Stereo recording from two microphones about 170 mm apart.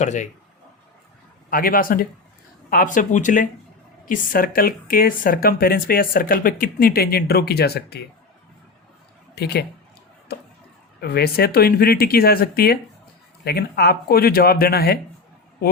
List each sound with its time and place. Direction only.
0.0 s speech: 45° left (ahead or behind)
1.5 s speech: 55° left (ahead or behind)
9.3 s speech: 70° left (ahead or behind)
10.3 s a sound: 70° left (ahead or behind)
11.0 s speech: 65° left (ahead or behind)